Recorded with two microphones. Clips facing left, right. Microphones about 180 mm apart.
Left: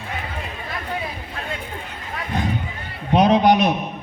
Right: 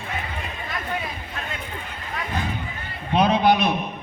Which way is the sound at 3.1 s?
45° left (ahead or behind).